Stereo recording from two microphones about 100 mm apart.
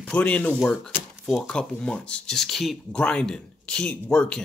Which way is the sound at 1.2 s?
Centre (ahead or behind).